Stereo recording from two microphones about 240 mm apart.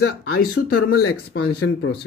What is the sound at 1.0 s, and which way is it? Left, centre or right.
Speech, left.